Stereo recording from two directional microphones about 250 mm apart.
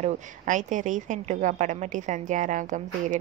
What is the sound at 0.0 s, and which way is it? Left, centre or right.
A woman's voice, right.